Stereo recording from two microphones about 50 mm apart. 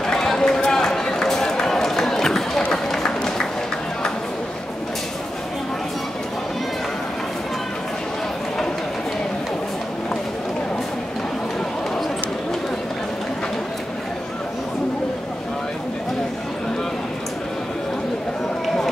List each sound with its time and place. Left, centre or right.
0.0 s run: centre